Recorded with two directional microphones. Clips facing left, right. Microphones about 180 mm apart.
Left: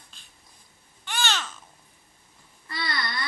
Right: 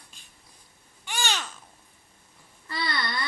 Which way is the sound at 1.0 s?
10° right (ahead or behind).